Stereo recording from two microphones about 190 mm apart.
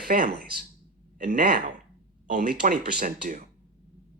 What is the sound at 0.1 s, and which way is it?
Speech, 50° right (ahead or behind).